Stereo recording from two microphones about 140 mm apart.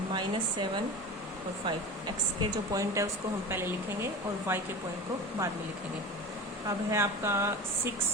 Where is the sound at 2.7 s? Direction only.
20° right (ahead or behind).